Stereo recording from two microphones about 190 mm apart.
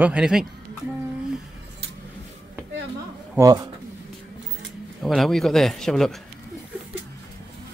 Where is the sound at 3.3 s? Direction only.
20° right (ahead or behind).